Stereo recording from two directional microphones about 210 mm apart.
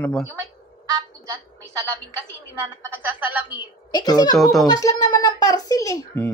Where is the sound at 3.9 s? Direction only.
20° left (ahead or behind).